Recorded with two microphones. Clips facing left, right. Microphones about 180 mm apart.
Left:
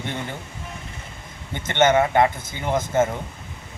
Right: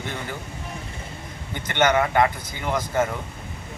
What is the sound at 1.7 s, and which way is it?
A man's voice, 25° left (ahead or behind).